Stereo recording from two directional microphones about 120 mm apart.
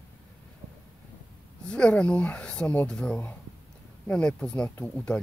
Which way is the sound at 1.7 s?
10° left (ahead or behind).